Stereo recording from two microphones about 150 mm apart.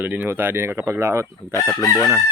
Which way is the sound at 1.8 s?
20° left (ahead or behind).